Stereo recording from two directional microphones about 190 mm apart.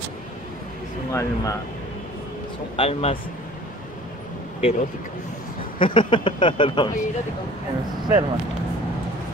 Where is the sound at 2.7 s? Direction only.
30° left (ahead or behind).